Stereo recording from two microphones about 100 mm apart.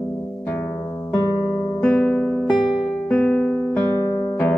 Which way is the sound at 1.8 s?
10° left (ahead or behind).